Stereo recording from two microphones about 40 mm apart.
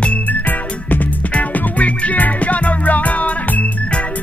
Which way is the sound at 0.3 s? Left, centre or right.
Left.